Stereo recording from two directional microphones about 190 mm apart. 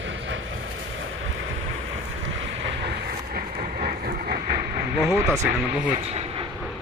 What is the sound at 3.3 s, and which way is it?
Vehicle, 40° right (ahead or behind).